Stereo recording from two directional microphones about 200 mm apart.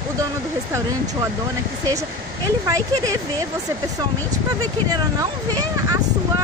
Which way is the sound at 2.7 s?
15° right (ahead or behind).